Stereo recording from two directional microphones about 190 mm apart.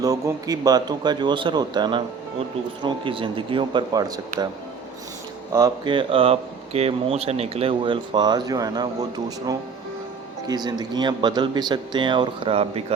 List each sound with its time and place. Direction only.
0.0 s speech: 20° right (ahead or behind)
5.5 s speech: 20° right (ahead or behind)